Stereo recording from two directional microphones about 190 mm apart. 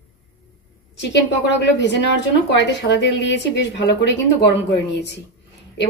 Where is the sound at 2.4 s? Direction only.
65° left (ahead or behind).